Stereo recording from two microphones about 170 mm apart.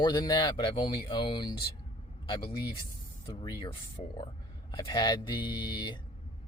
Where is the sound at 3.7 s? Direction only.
30° left (ahead or behind).